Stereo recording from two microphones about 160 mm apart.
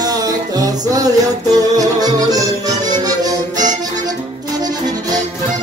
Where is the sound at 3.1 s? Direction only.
25° right (ahead or behind).